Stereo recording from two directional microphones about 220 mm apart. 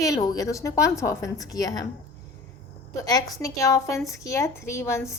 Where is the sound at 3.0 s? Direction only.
15° left (ahead or behind).